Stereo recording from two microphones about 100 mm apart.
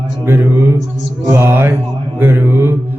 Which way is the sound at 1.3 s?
25° right (ahead or behind).